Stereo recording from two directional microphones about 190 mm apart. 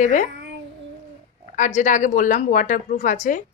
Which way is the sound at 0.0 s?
40° left (ahead or behind).